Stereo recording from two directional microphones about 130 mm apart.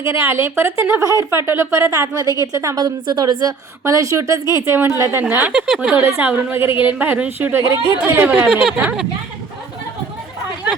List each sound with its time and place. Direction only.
0.0 s a woman's voice: 20° right (ahead or behind); by 6.0 s 5° right (ahead or behind)
6.0 s speech: 20° right (ahead or behind)
8.3 s speech: 5° right (ahead or behind)